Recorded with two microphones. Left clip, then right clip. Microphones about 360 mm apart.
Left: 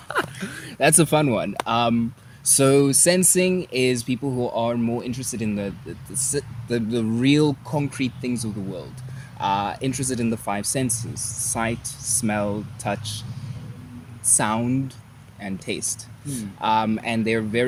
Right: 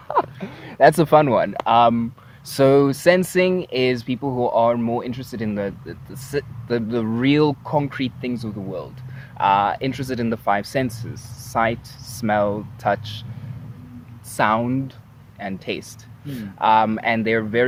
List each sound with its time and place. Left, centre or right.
0.1 s a sound: centre
1.6 s speech: right
4.2 s speech: right
4.5 s speech: right
4.8 s speech: right
5.0 s speech: right
14.3 s speech: right